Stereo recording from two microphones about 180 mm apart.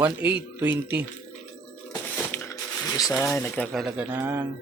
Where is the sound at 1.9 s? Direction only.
15° left (ahead or behind).